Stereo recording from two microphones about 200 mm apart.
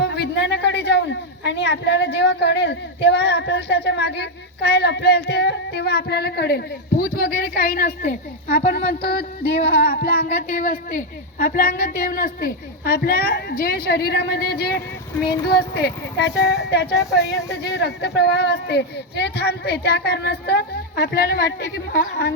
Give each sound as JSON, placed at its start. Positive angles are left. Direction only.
{"t": 0.0, "sound": "a woman's voice", "side_deg": 60}